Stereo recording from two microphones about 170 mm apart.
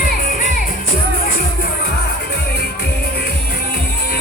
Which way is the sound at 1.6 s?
70° left (ahead or behind).